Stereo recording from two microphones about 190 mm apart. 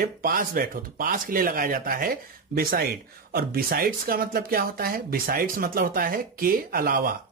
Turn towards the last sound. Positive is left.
turn(degrees=-50)  # may be behind; listen again after turning